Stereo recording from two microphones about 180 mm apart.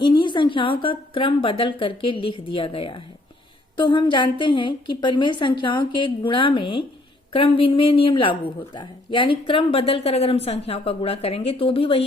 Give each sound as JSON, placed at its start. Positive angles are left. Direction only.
{"t": 0.0, "sound": "a woman's voice", "side_deg": 25}